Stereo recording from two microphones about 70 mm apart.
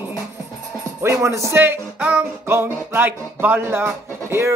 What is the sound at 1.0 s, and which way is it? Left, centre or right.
Speech, right.